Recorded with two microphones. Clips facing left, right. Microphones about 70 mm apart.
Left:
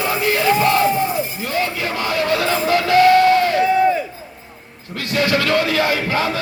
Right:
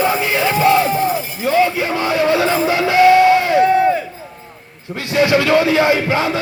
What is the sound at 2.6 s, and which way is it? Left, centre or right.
Music, centre.